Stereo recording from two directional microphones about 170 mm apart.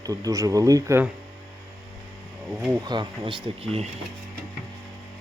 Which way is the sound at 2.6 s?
25° right (ahead or behind).